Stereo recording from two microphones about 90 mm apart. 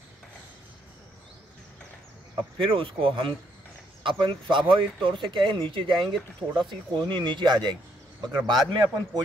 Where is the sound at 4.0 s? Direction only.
65° right (ahead or behind).